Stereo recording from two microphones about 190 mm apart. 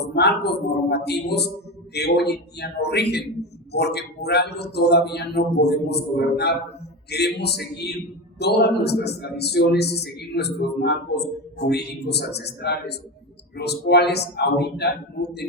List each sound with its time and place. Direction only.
0.0 s a man's voice: 60° left (ahead or behind)